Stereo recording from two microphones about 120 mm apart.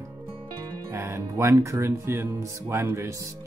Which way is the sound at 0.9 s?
20° right (ahead or behind).